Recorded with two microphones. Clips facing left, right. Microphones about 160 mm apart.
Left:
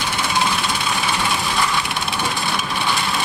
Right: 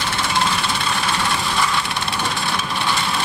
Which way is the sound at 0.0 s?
Centre (ahead or behind).